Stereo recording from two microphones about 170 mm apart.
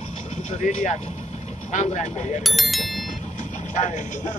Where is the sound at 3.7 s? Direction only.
45° left (ahead or behind).